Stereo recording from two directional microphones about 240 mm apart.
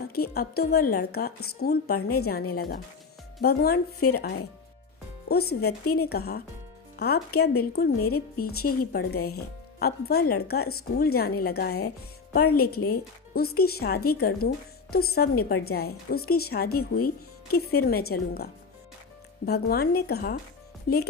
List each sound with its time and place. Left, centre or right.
0.1 s a woman's voice: left
19.5 s a woman's voice: left